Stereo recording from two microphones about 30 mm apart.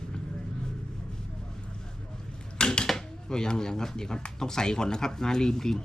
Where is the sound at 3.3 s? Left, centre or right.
Left.